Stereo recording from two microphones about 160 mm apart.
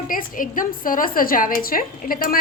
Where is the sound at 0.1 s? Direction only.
60° left (ahead or behind).